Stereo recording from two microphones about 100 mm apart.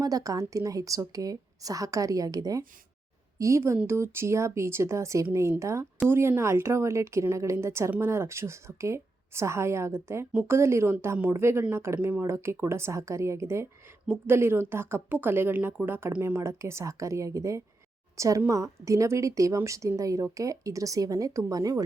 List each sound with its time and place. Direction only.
0.0 s a woman's voice: 35° right (ahead or behind)